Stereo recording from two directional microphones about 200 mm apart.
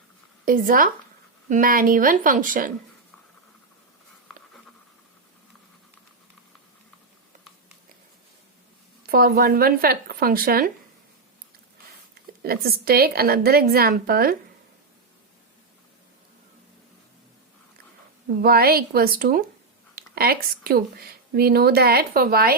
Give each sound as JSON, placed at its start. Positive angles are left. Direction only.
{"t": 0.4, "sound": "speech", "side_deg": -45}
{"t": 9.0, "sound": "speech", "side_deg": -50}
{"t": 12.4, "sound": "speech", "side_deg": -50}
{"t": 18.4, "sound": "speech", "side_deg": -50}